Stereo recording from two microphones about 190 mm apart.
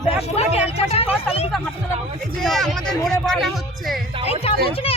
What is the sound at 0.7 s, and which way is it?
Speech, 30° left (ahead or behind).